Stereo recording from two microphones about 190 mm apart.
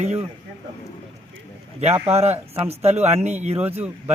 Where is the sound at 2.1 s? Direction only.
35° right (ahead or behind).